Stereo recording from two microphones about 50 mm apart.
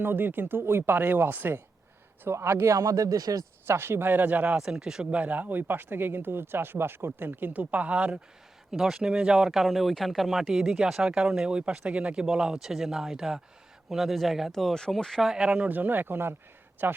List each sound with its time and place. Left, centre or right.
0.0 s speech: right
2.2 s speech: right
4.5 s speech: centre
5.1 s speech: right
7.6 s speech: right
8.7 s speech: centre
9.5 s speech: centre; by 12.2 s right
12.2 s speech: centre
14.5 s speech: centre
15.3 s speech: centre
15.7 s a man's voice: right